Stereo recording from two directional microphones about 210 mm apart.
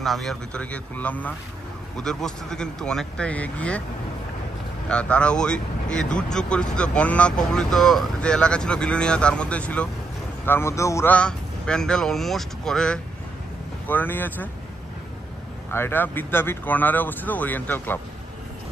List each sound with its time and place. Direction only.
0.0 s speech: centre (ahead or behind)
4.8 s speech: 5° left (ahead or behind)
15.7 s speech: 10° left (ahead or behind)